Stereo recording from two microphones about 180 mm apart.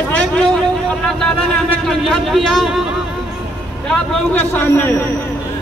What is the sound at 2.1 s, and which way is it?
Speech, centre (ahead or behind).